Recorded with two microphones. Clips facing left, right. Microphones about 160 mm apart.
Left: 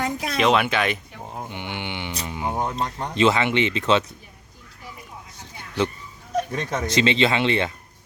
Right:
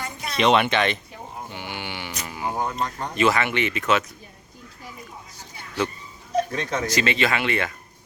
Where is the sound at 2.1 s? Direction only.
25° left (ahead or behind).